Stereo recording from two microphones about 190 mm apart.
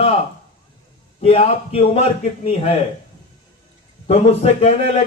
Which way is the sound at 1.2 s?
30° left (ahead or behind).